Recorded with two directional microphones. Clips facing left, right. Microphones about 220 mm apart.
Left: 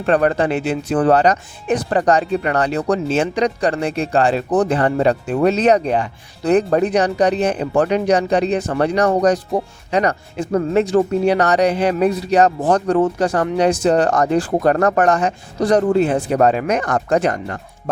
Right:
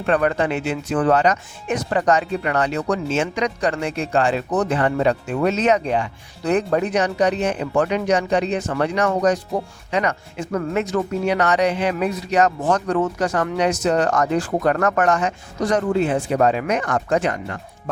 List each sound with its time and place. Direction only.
0.0 s speech: 35° left (ahead or behind)